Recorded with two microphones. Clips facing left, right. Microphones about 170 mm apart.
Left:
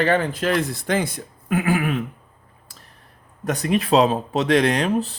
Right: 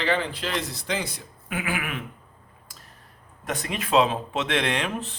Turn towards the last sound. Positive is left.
turn(degrees=35)  # may be behind; listen again after turning